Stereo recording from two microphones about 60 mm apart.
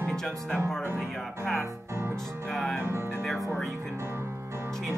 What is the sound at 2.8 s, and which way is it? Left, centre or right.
Music, right.